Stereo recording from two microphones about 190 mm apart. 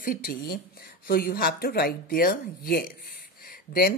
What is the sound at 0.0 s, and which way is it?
Speech, 50° left (ahead or behind).